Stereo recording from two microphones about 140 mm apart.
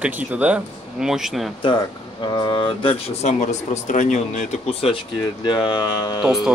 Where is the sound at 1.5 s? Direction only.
35° left (ahead or behind).